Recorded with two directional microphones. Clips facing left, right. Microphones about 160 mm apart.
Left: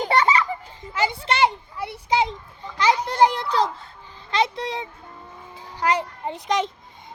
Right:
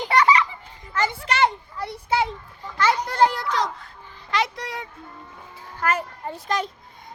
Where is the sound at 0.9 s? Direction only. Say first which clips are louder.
Left 1 dB; 10° left (ahead or behind).